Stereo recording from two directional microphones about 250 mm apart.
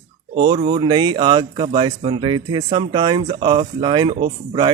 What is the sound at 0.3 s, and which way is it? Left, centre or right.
A man's voice, right.